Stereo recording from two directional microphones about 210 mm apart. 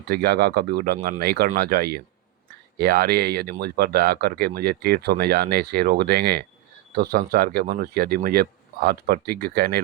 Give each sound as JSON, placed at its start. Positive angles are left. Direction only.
{"t": 0.1, "sound": "speech", "side_deg": -50}